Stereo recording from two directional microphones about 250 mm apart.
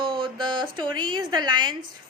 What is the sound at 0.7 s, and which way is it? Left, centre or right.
A woman's voice, centre.